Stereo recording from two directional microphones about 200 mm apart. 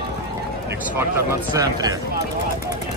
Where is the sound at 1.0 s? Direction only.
15° right (ahead or behind).